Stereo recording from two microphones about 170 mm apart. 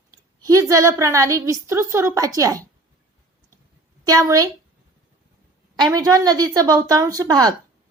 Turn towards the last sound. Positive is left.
turn(degrees=-25)  # may be behind; listen again after turning